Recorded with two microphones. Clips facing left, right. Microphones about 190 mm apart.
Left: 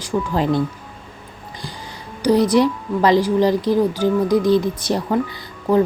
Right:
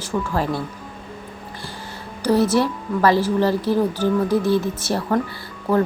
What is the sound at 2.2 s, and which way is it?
Speech, 15° left (ahead or behind).